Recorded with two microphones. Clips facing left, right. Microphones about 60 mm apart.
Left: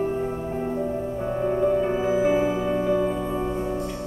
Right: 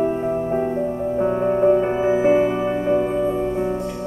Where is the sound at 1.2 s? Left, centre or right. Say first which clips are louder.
Right 6 dB; right.